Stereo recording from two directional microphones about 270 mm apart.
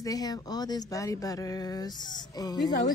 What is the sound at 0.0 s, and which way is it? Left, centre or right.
A woman's voice, centre.